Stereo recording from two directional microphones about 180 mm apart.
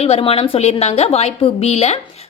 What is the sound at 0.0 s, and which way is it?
A woman's voice, 35° left (ahead or behind).